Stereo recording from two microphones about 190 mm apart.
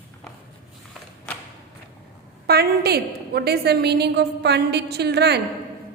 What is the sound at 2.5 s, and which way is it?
A woman's voice, 55° right (ahead or behind).